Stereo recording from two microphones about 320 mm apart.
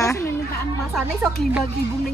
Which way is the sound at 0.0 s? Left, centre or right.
Centre.